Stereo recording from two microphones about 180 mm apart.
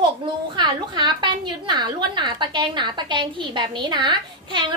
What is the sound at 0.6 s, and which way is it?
A woman's voice, 25° right (ahead or behind).